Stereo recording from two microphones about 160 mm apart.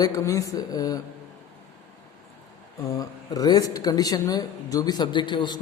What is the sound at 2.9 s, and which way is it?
A man's voice, 25° left (ahead or behind).